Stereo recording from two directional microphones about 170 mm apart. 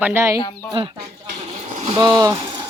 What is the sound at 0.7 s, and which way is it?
Speech, 30° right (ahead or behind).